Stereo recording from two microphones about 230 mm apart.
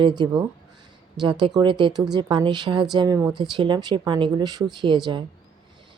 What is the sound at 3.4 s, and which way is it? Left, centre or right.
Speech, centre.